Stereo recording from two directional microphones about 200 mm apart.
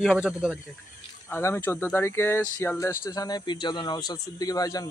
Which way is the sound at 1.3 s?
10° left (ahead or behind).